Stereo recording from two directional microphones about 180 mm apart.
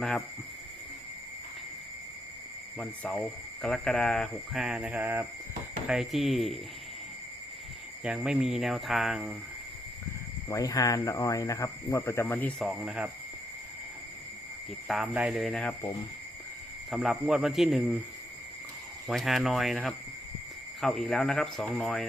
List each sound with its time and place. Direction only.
2.7 s speech: 5° left (ahead or behind)
8.0 s speech: 5° right (ahead or behind)
10.5 s speech: 20° left (ahead or behind); by 13.1 s 5° right (ahead or behind)
14.8 s speech: 5° right (ahead or behind)
16.9 s speech: centre (ahead or behind)
19.0 s speech: centre (ahead or behind)